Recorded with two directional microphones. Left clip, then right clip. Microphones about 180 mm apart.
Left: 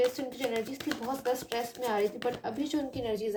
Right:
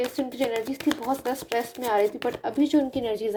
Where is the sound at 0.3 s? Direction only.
35° right (ahead or behind).